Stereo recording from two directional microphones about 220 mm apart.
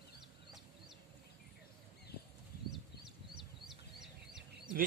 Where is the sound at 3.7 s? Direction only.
Centre (ahead or behind).